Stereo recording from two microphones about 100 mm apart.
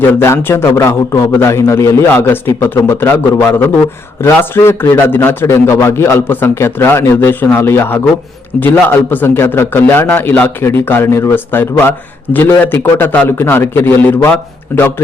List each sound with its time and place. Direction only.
0.1 s a man's voice: 25° left (ahead or behind)